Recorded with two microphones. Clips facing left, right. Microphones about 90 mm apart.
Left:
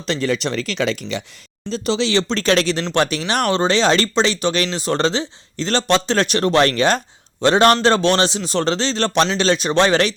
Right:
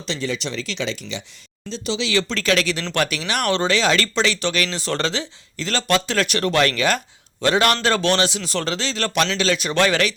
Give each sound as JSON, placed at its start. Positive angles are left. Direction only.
{"t": 0.0, "sound": "speech", "side_deg": 50}
{"t": 1.7, "sound": "speech", "side_deg": 40}